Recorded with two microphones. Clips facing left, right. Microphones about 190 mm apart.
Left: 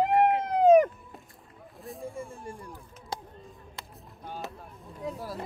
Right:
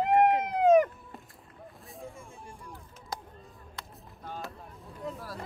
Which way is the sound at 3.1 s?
25° left (ahead or behind).